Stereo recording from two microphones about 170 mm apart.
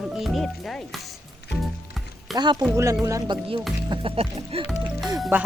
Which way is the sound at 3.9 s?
30° right (ahead or behind).